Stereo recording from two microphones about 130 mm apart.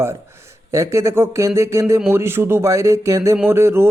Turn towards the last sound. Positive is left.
turn(degrees=-20)  # may be behind; listen again after turning